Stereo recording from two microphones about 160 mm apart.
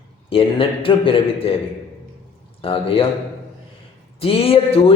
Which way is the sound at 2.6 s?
35° left (ahead or behind).